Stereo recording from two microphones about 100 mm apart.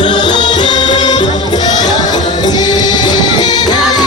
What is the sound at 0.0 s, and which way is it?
Music, 50° left (ahead or behind).